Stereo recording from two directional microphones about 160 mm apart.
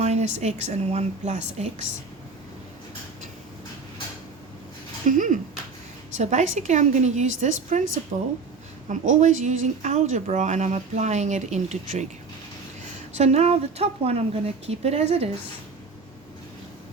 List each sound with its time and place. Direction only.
0.0 s speech: 45° right (ahead or behind)
5.0 s speech: 55° right (ahead or behind)
13.1 s speech: 45° right (ahead or behind)